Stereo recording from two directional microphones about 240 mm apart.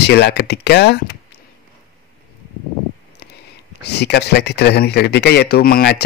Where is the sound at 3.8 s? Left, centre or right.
Left.